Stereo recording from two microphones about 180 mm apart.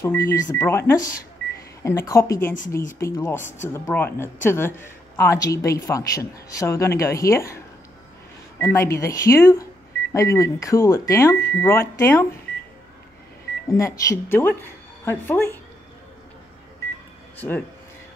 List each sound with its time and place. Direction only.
0.0 s speech: 15° left (ahead or behind)
13.7 s speech: 15° left (ahead or behind)
17.4 s speech: 10° left (ahead or behind)